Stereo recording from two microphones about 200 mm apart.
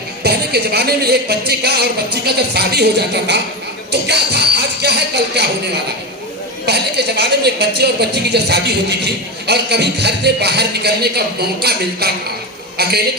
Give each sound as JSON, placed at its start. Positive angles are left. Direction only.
{"t": 0.2, "sound": "a man's voice", "side_deg": -55}
{"t": 6.7, "sound": "a man's voice", "side_deg": -55}